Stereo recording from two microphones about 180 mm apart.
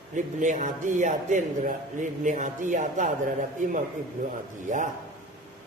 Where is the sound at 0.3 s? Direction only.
45° right (ahead or behind).